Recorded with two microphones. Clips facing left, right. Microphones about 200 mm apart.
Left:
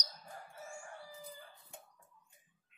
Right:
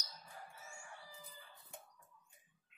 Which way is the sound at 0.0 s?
45° left (ahead or behind).